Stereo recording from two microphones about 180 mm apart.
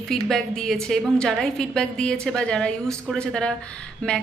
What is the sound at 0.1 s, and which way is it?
A woman's voice, 5° left (ahead or behind).